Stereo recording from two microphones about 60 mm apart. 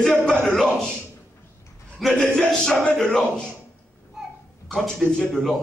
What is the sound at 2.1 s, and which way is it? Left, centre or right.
A man's voice, centre.